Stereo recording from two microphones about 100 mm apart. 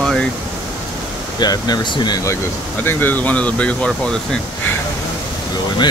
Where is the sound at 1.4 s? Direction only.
45° left (ahead or behind).